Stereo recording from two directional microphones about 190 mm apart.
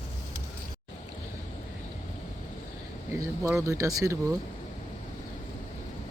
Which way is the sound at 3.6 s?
15° right (ahead or behind).